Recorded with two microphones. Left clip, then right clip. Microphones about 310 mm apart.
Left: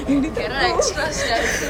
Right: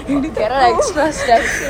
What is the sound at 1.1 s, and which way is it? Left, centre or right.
Speech, centre.